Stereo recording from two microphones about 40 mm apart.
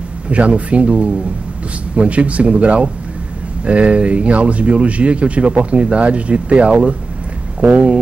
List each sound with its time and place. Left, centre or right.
0.3 s speech: right